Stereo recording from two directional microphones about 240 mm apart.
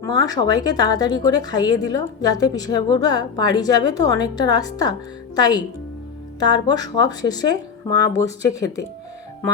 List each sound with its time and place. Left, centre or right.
0.0 s a woman's voice: centre